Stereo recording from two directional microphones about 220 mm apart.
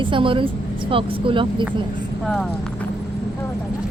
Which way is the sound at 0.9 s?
25° right (ahead or behind).